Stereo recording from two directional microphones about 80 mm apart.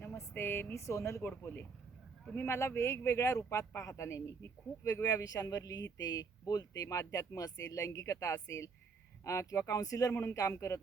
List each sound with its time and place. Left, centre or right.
0.2 s speech: left
1.2 s speech: left